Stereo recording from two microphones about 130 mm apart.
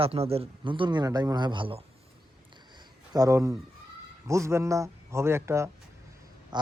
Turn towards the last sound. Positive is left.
turn(degrees=-35)  # may be behind; listen again after turning